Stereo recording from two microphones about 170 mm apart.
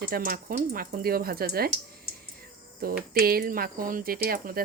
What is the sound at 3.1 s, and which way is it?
Speech, 60° right (ahead or behind).